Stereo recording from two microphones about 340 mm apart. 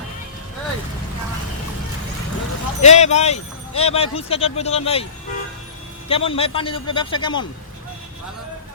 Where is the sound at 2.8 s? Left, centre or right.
Centre.